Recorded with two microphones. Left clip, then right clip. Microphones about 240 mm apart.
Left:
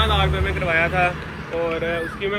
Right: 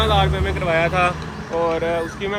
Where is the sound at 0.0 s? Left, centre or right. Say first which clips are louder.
Right 2 dB; right.